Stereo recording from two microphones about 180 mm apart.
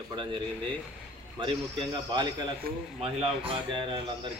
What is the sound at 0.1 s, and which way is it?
A man's voice, 25° right (ahead or behind).